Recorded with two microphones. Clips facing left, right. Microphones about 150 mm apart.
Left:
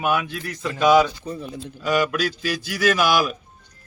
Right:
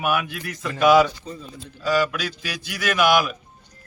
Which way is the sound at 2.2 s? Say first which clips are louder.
Left 6 dB; 35° left (ahead or behind).